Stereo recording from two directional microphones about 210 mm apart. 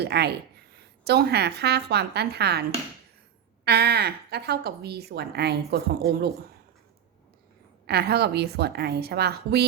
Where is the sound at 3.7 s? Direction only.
50° right (ahead or behind).